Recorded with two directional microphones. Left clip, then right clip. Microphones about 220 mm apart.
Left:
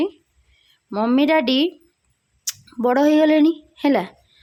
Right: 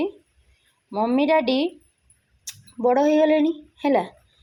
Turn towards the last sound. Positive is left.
turn(degrees=30)  # may be behind; listen again after turning